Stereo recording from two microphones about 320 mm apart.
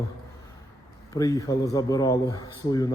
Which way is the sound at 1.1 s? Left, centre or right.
Centre.